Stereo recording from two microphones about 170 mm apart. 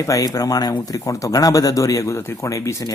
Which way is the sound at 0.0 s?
20° left (ahead or behind).